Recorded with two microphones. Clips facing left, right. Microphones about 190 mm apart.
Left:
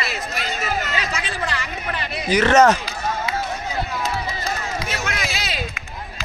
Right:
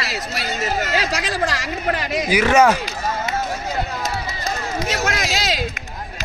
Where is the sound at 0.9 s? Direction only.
90° right.